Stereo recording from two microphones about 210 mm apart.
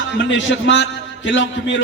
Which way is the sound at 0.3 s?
60° left (ahead or behind).